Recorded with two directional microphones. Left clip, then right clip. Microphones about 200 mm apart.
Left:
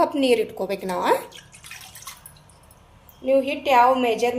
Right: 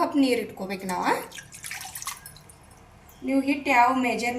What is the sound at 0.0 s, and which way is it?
A woman's voice, 45° left (ahead or behind).